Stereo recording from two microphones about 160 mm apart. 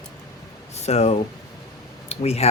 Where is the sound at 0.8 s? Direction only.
45° left (ahead or behind).